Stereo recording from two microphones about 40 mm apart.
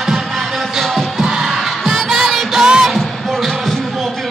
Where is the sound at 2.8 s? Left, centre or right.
Centre.